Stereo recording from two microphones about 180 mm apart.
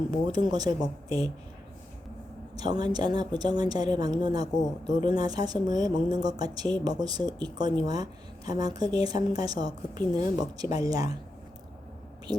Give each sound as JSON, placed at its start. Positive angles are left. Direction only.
{"t": 0.3, "sound": "a woman's voice", "side_deg": -20}
{"t": 2.6, "sound": "a woman's voice", "side_deg": -25}